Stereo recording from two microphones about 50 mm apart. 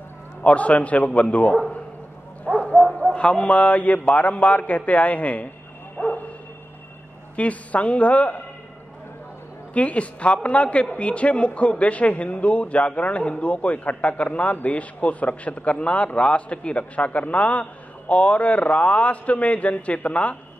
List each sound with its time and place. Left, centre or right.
0.4 s a man's voice: left
2.5 s dog: centre
2.9 s bow-wow: centre
3.2 s a man's voice: left
5.9 s bow-wow: left
7.3 s a man's voice: left
9.8 s a man's voice: left